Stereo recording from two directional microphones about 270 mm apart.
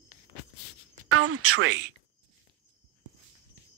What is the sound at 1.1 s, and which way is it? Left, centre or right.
Speech, right.